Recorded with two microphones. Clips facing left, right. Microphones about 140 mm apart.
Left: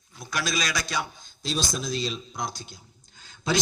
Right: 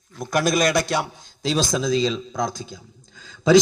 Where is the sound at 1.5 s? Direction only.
90° right.